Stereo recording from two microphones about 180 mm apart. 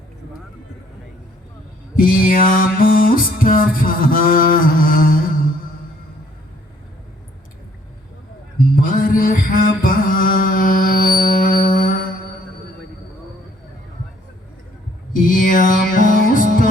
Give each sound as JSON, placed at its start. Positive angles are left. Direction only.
{"t": 2.0, "sound": "music", "side_deg": 50}
{"t": 8.7, "sound": "mantra", "side_deg": 50}
{"t": 15.1, "sound": "music", "side_deg": 50}